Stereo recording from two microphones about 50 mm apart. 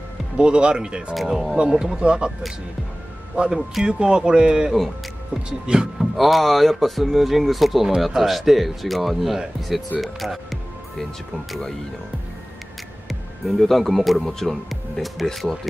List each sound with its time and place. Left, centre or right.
0.4 s speech: centre
1.1 s speech: centre
1.6 s speech: centre
3.3 s speech: centre
5.3 s speech: right
5.9 s speech: centre
13.1 s speech: centre